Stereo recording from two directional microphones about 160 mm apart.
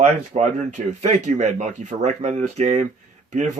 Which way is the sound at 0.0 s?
45° right (ahead or behind).